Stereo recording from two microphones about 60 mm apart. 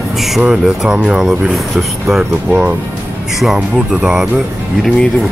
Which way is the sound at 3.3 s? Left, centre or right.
Centre.